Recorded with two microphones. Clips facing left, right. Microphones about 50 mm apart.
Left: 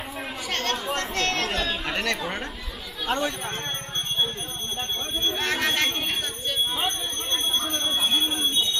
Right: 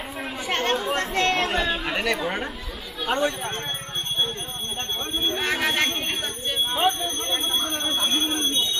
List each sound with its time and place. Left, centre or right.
0.5 s chatter: centre
1.9 s speech: centre
5.2 s speech: centre